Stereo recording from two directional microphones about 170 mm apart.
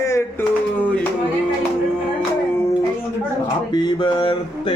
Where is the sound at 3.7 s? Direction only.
25° left (ahead or behind).